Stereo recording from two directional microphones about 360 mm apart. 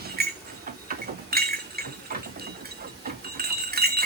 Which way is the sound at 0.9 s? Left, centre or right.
Right.